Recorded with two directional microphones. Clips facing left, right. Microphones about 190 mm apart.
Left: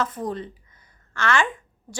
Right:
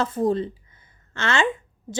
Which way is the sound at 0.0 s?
30° right (ahead or behind).